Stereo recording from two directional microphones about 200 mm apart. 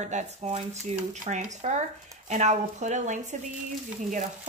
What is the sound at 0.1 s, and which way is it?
Speech, 35° right (ahead or behind).